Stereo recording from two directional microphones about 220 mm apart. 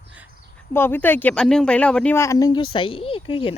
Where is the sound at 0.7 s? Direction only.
10° left (ahead or behind).